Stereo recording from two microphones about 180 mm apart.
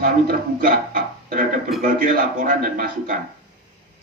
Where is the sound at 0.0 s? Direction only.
55° right (ahead or behind).